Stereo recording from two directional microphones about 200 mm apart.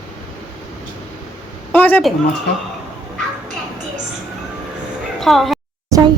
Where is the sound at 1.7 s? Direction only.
10° left (ahead or behind).